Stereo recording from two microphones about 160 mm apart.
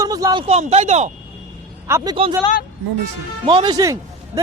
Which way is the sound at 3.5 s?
30° right (ahead or behind).